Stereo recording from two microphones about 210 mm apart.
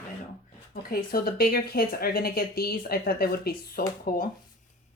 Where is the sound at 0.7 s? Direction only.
45° left (ahead or behind).